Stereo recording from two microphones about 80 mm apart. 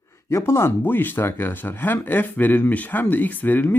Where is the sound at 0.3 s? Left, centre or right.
Left.